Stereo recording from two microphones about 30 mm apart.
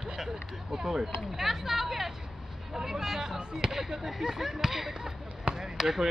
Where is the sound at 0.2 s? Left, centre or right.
Centre.